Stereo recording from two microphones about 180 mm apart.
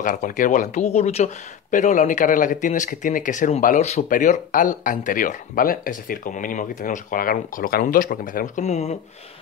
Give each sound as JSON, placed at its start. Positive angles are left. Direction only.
{"t": 0.0, "sound": "speech", "side_deg": 45}